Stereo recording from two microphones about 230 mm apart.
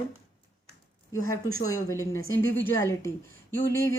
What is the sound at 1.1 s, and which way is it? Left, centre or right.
Speech, centre.